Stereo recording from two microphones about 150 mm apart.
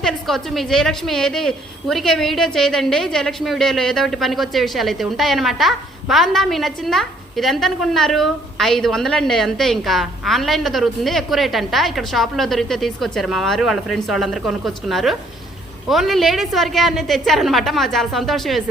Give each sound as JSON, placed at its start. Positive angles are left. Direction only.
{"t": 0.0, "sound": "a woman's voice", "side_deg": 0}